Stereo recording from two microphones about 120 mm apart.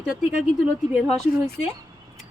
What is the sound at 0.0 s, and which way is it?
Speech, 5° right (ahead or behind).